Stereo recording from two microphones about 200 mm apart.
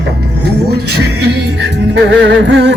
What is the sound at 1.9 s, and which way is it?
Music, 60° right (ahead or behind).